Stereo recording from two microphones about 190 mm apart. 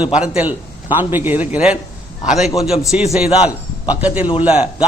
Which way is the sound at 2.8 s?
5° right (ahead or behind).